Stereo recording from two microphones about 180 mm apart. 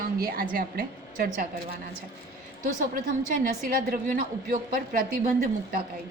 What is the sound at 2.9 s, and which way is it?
Speech, 50° right (ahead or behind).